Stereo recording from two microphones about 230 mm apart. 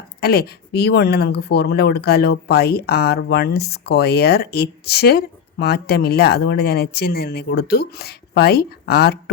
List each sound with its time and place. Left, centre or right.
0.2 s speech: left